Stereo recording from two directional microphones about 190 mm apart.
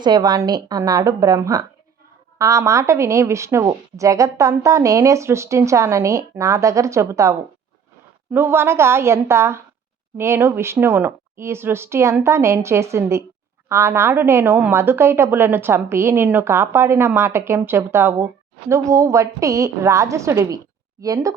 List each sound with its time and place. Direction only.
0.0 s a woman's voice: 20° right (ahead or behind)